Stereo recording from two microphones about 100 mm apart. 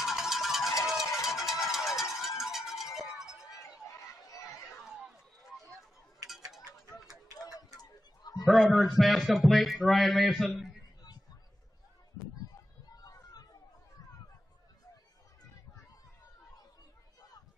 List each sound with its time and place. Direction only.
0.0 s music: 5° right (ahead or behind)
3.8 s chatter: 30° left (ahead or behind)
4.8 s run: 5° right (ahead or behind)
8.2 s a sound: 40° left (ahead or behind)
8.7 s a man's voice: centre (ahead or behind)
12.9 s a sound: 40° left (ahead or behind)